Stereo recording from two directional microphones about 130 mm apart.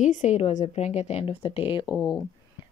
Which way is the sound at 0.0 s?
70° left (ahead or behind).